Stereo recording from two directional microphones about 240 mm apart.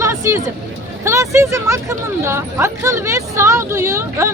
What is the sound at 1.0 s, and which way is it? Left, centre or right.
A woman's voice, centre.